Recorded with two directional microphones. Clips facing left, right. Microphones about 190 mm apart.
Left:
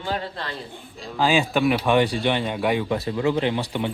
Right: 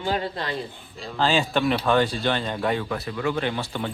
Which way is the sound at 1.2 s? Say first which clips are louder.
Left 2 dB; 10° left (ahead or behind).